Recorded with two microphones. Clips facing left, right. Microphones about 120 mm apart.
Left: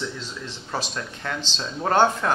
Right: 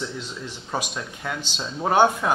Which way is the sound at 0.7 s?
10° right (ahead or behind).